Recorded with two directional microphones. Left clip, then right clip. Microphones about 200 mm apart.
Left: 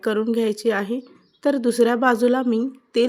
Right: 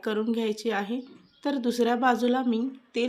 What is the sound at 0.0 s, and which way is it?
A woman's voice, 25° left (ahead or behind).